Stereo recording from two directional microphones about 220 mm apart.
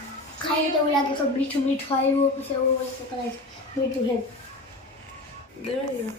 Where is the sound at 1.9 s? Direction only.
25° left (ahead or behind).